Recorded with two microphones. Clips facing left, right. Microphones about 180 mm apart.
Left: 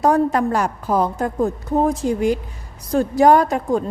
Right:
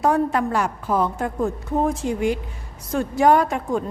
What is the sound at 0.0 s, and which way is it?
A woman's voice, 40° left (ahead or behind).